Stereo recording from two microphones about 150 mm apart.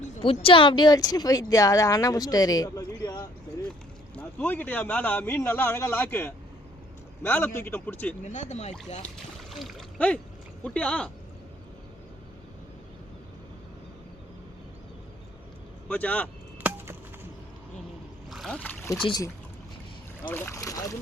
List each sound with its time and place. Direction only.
0.2 s speech: 35° left (ahead or behind)
4.1 s a man's voice: 10° left (ahead or behind)
8.2 s speech: 50° left (ahead or behind)
9.1 s speech: centre (ahead or behind)
15.9 s a man's voice: 10° left (ahead or behind)
16.6 s chop: 15° right (ahead or behind)
18.3 s speech: centre (ahead or behind)
19.0 s speech: 25° left (ahead or behind)
20.3 s speech: 15° left (ahead or behind)